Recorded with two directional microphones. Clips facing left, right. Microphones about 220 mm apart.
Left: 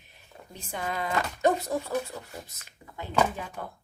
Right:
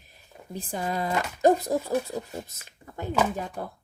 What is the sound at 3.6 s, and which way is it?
Speech, 35° right (ahead or behind).